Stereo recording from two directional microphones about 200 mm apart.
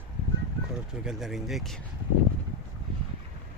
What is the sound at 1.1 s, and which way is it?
Speech, centre (ahead or behind).